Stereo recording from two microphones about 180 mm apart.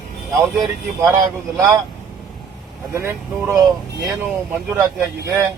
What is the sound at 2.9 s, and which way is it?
Speech, 15° right (ahead or behind).